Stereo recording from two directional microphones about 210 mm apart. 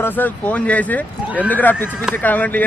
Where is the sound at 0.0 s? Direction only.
10° left (ahead or behind).